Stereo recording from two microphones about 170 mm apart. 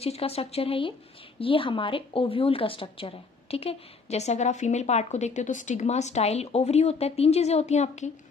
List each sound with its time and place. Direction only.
0.0 s speech: 35° left (ahead or behind)